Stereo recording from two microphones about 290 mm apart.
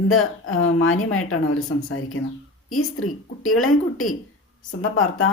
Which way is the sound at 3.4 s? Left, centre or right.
Left.